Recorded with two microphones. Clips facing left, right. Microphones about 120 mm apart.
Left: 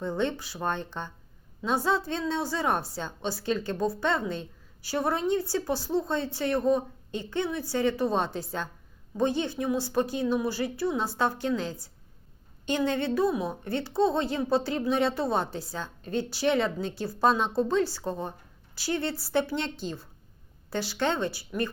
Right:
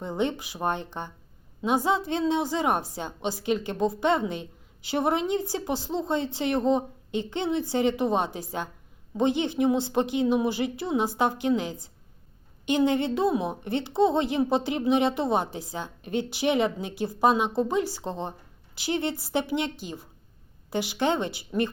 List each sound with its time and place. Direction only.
0.0 s a woman's voice: 15° right (ahead or behind)